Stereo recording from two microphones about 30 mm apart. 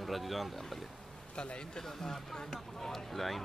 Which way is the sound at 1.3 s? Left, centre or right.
Left.